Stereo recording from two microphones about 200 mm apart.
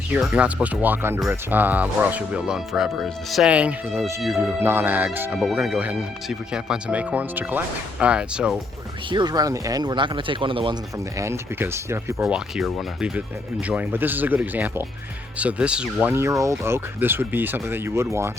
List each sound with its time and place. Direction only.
0.1 s speech: 5° right (ahead or behind)
9.0 s speech: 20° right (ahead or behind)
11.2 s speech: 15° right (ahead or behind)
12.2 s speech: centre (ahead or behind)